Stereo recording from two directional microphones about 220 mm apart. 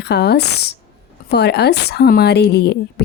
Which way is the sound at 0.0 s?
50° left (ahead or behind).